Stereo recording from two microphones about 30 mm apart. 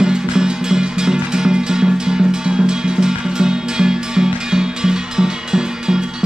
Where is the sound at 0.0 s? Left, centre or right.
Right.